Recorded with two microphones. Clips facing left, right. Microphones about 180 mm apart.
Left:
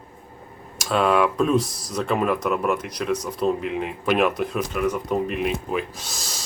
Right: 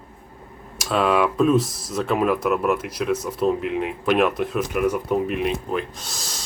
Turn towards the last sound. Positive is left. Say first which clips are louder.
# even
turn(degrees=0)  # may be behind; listen again after turning